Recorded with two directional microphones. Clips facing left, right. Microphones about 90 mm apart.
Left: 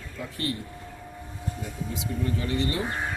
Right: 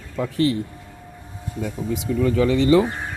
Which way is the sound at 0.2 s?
90° right.